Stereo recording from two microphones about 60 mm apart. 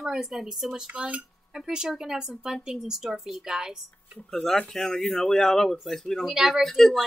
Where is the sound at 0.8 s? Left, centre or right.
Centre.